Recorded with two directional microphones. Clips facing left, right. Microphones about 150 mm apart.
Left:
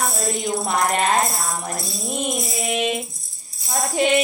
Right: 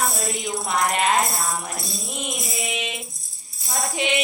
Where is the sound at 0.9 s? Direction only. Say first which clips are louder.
Even; 40° left (ahead or behind).